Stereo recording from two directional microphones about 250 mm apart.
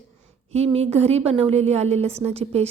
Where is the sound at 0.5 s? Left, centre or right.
Right.